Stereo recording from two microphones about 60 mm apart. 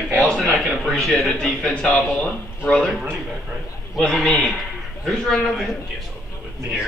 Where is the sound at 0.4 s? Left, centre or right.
Centre.